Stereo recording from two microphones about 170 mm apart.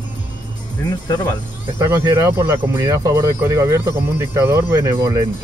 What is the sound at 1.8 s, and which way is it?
Speech, 15° right (ahead or behind).